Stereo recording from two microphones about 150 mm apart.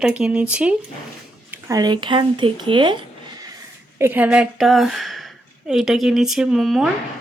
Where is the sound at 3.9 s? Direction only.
15° right (ahead or behind).